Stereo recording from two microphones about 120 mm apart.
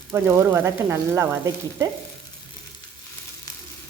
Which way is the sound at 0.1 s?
20° right (ahead or behind).